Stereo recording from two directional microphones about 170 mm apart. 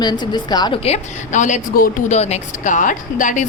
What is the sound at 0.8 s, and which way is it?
A woman's voice, 40° left (ahead or behind).